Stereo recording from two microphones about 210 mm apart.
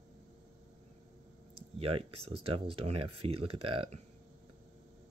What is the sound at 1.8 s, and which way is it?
Speech, 25° right (ahead or behind).